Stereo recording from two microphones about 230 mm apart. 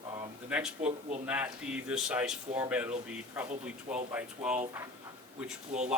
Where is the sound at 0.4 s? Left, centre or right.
Centre.